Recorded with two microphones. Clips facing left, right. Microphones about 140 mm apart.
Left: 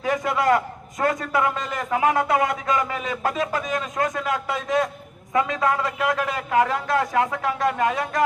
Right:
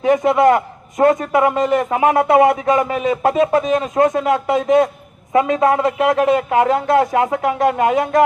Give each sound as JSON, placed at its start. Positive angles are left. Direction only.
{"t": 0.0, "sound": "a man's voice", "side_deg": -25}